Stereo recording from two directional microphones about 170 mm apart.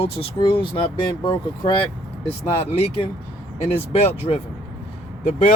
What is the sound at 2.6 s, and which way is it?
Speech, 35° left (ahead or behind).